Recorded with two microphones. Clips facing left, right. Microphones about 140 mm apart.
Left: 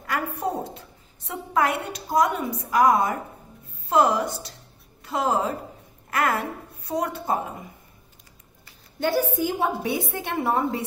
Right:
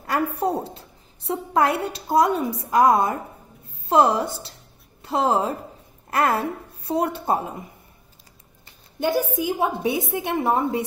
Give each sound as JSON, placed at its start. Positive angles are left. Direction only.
{"t": 0.0, "sound": "a woman's voice", "side_deg": -35}
{"t": 9.0, "sound": "a woman's voice", "side_deg": -15}